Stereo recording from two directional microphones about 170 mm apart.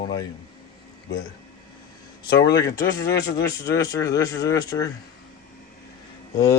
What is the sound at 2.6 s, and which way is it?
Speech, 20° left (ahead or behind).